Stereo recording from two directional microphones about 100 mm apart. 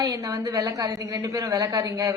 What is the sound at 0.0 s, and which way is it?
A woman's voice, 35° right (ahead or behind).